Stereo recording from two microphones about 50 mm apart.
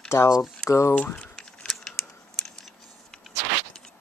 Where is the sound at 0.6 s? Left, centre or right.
Left.